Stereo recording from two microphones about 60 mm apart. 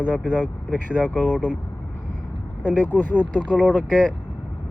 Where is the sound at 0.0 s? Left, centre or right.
Left.